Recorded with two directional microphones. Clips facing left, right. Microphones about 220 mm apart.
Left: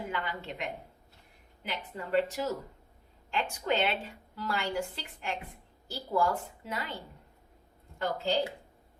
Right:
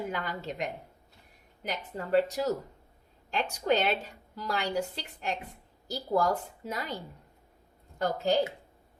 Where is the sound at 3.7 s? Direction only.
40° right (ahead or behind).